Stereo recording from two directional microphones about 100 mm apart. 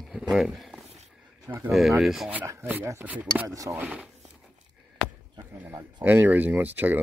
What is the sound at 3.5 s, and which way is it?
Speech, 30° right (ahead or behind).